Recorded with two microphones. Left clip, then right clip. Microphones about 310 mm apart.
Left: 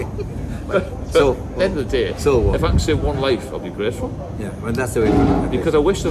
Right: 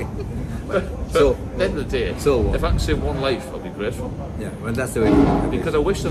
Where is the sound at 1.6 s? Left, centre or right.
Left.